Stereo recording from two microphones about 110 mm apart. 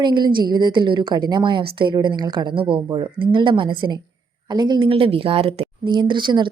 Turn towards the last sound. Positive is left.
turn(degrees=-45)  # may be behind; listen again after turning